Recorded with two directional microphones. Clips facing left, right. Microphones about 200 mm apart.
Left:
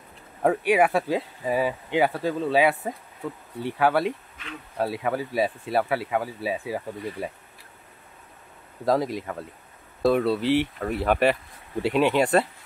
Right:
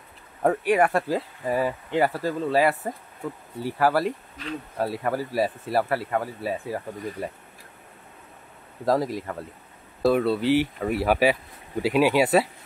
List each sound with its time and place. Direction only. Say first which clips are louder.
0.4 s speech: even; 5° left (ahead or behind)
4.4 s speech: right 7 dB; 35° right (ahead or behind)
4.7 s speech: left 1 dB; centre (ahead or behind)
8.8 s speech: even; centre (ahead or behind)